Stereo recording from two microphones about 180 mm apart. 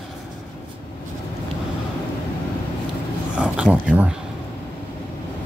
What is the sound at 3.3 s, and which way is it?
Speech, 5° right (ahead or behind).